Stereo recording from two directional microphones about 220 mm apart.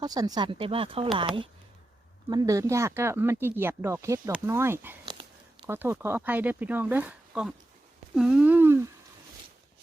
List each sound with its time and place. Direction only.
0.0 s speech: 15° right (ahead or behind)
2.3 s speech: 15° right (ahead or behind)
5.0 s a sound: 20° right (ahead or behind)
5.6 s speech: 10° right (ahead or behind)